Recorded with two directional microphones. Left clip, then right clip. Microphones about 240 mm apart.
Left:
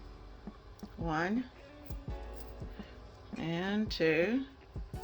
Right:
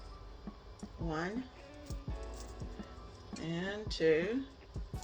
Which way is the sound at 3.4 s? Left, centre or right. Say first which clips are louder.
Left 4 dB; left.